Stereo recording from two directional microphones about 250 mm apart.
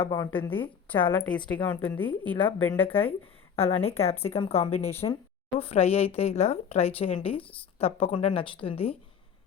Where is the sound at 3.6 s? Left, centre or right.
Left.